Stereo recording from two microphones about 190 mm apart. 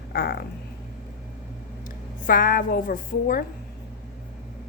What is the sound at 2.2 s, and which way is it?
A woman's voice, 45° left (ahead or behind).